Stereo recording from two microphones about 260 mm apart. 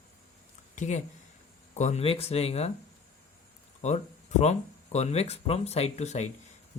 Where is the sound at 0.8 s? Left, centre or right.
Left.